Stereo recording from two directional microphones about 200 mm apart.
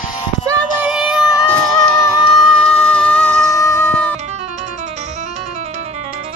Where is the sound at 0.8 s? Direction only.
5° right (ahead or behind).